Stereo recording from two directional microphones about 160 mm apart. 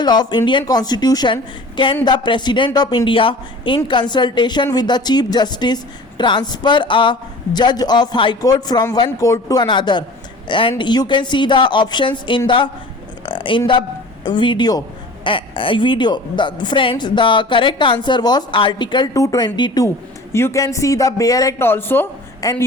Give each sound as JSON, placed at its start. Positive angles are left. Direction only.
{"t": 0.0, "sound": "a woman's voice", "side_deg": 25}
{"t": 13.2, "sound": "a sound", "side_deg": 30}
{"t": 14.3, "sound": "a woman's voice", "side_deg": 30}